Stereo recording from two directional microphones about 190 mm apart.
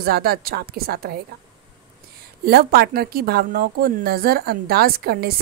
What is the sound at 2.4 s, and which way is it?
A woman's voice, 55° right (ahead or behind).